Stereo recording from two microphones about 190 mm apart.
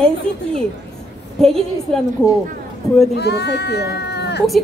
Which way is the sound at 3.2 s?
60° left (ahead or behind).